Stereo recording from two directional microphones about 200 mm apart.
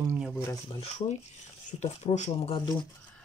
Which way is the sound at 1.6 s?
35° left (ahead or behind).